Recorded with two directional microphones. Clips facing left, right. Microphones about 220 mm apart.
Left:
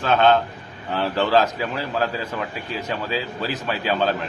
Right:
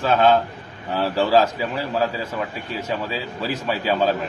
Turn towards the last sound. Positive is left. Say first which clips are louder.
# right 2 dB
turn(degrees=-5)  # may be behind; listen again after turning